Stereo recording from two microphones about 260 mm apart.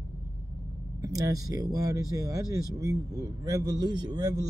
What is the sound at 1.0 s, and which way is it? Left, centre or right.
Speech, centre.